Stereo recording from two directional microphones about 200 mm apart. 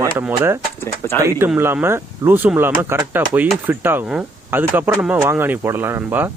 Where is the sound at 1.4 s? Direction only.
10° right (ahead or behind).